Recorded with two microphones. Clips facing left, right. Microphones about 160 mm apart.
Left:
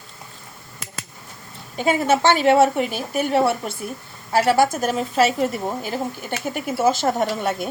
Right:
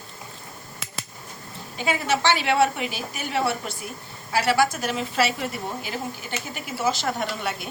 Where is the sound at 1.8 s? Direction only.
45° left (ahead or behind).